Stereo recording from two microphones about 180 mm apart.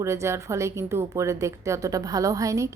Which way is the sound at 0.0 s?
15° right (ahead or behind).